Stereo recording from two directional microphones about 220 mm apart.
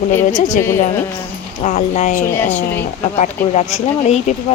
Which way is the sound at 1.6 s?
30° left (ahead or behind).